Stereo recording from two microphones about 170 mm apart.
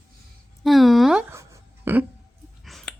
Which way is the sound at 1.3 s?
15° right (ahead or behind).